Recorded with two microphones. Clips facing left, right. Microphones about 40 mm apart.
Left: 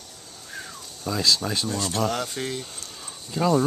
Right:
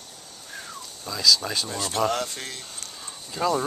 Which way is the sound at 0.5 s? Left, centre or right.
Centre.